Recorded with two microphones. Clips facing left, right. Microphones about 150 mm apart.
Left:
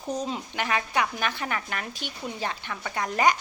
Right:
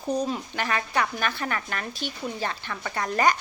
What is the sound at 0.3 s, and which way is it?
A woman's voice, 15° left (ahead or behind).